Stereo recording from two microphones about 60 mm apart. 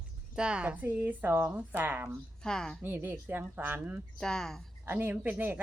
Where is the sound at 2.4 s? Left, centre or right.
Centre.